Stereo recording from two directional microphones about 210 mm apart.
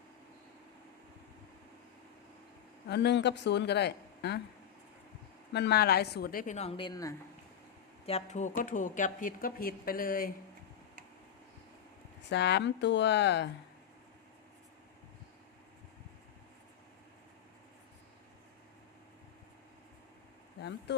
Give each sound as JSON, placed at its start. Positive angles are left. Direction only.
{"t": 2.9, "sound": "speech", "side_deg": 55}
{"t": 5.5, "sound": "speech", "side_deg": 50}
{"t": 8.0, "sound": "speech", "side_deg": 30}
{"t": 12.3, "sound": "speech", "side_deg": 55}
{"t": 20.6, "sound": "speech", "side_deg": 55}